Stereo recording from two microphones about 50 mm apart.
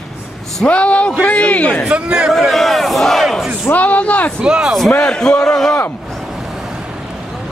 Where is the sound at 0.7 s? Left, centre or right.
Left.